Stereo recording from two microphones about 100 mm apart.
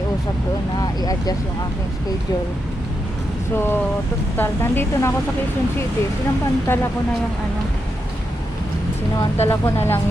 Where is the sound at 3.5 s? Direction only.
20° left (ahead or behind).